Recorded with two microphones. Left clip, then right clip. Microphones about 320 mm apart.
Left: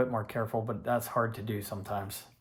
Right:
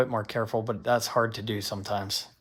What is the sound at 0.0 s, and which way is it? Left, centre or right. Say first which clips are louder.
Speech: right 4 dB; right.